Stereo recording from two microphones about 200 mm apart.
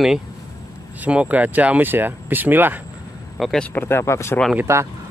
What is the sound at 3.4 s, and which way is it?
Speech, 5° left (ahead or behind).